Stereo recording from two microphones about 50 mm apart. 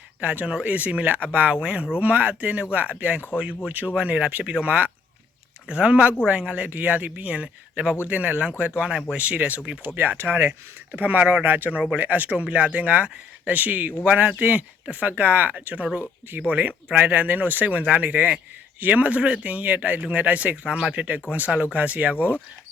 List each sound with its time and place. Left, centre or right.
0.2 s speech: right
8.8 s speech: centre
9.1 s speech: right
10.0 s speech: right
20.7 s speech: centre; by 22.1 s right
22.1 s speech: left